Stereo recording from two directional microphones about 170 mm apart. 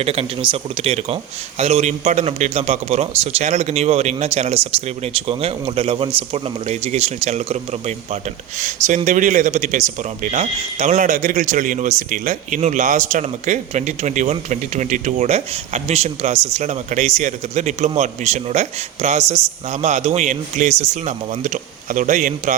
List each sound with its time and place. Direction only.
0.0 s speech: 35° right (ahead or behind)